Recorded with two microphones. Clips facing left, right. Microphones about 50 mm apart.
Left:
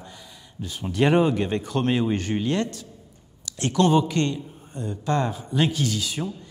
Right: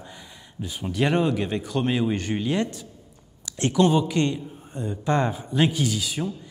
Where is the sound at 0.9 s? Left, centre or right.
Centre.